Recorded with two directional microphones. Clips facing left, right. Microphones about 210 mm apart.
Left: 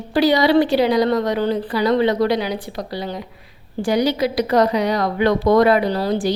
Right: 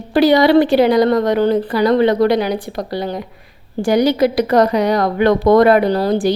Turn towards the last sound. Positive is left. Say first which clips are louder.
# right 4 dB
turn(degrees=-50)  # may be behind; listen again after turning